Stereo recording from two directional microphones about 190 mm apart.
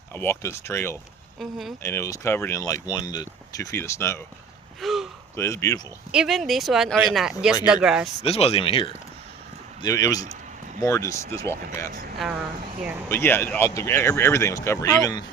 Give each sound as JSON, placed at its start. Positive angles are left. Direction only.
{"t": 0.1, "sound": "speech", "side_deg": 15}
{"t": 1.4, "sound": "speech", "side_deg": 0}
{"t": 1.8, "sound": "speech", "side_deg": 15}
{"t": 4.8, "sound": "gasp", "side_deg": 0}
{"t": 5.4, "sound": "speech", "side_deg": 15}
{"t": 6.1, "sound": "speech", "side_deg": 0}
{"t": 8.2, "sound": "speech", "side_deg": 30}
{"t": 9.8, "sound": "speech", "side_deg": 20}
{"t": 13.1, "sound": "speech", "side_deg": 10}